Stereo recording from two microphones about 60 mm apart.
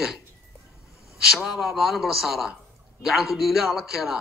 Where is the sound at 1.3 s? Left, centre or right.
Centre.